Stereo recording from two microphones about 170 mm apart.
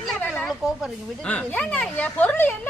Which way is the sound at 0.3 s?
5° left (ahead or behind).